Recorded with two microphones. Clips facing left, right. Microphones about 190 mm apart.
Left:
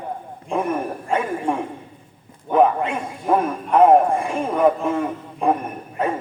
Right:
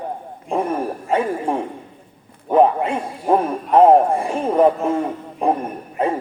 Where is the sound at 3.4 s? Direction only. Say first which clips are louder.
Right 2 dB; 30° right (ahead or behind).